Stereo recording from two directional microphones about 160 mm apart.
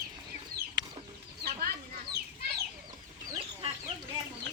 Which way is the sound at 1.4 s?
70° right (ahead or behind).